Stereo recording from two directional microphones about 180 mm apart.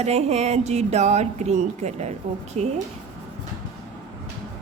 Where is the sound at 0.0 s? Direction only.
35° right (ahead or behind).